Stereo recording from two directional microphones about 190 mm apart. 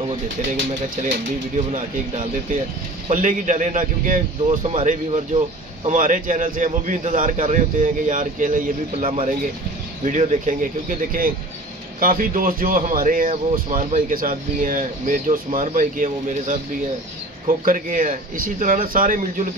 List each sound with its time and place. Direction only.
3.1 s a man's voice: 40° right (ahead or behind)